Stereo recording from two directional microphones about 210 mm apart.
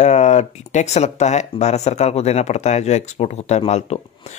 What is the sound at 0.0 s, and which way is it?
Speech, 35° left (ahead or behind).